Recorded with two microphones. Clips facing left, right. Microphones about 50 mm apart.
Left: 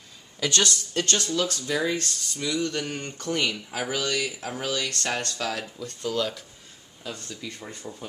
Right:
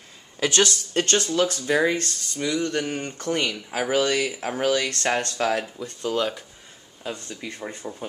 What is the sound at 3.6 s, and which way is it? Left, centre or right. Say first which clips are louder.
Speech: right 6 dB; right.